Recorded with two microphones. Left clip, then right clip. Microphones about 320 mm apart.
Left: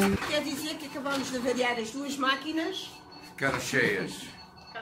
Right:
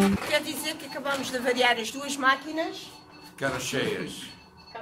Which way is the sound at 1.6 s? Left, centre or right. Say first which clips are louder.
Right 5 dB; right.